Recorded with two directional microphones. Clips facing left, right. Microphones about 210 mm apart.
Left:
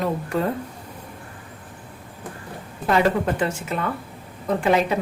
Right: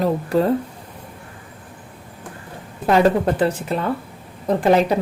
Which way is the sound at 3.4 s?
35° right (ahead or behind).